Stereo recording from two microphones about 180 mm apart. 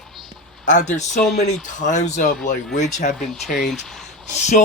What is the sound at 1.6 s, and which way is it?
Speech, 45° left (ahead or behind).